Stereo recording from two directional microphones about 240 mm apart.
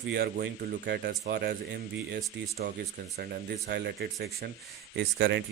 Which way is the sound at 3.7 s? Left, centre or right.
Right.